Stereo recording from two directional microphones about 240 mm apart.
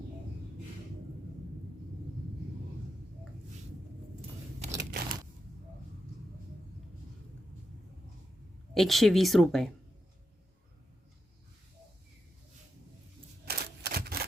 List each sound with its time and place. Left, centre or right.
4.6 s a sound: right
8.7 s a woman's voice: centre
13.4 s typewriter: right